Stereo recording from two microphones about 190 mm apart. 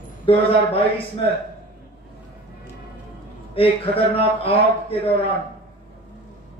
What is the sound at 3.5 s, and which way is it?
A man's voice, 30° left (ahead or behind).